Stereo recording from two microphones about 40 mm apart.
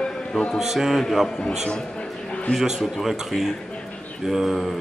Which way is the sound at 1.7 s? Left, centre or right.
Left.